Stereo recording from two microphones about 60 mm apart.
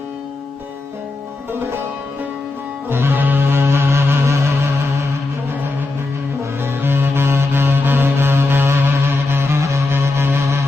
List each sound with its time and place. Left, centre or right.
2.9 s cello: right
3.4 s music: right
6.8 s music: right